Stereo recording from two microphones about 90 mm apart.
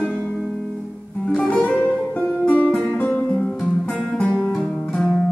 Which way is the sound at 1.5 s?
15° left (ahead or behind).